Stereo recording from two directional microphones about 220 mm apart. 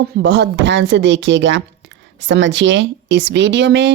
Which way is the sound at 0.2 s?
55° right (ahead or behind).